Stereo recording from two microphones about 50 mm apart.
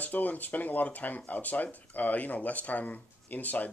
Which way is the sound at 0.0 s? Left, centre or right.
Left.